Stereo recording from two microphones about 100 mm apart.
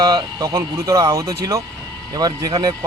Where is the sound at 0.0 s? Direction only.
45° right (ahead or behind).